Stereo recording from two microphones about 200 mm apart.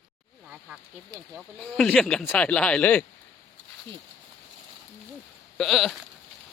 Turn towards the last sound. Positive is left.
turn(degrees=0)  # may be behind; listen again after turning